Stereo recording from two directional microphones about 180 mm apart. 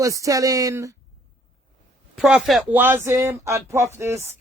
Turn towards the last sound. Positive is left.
turn(degrees=-15)  # may be behind; listen again after turning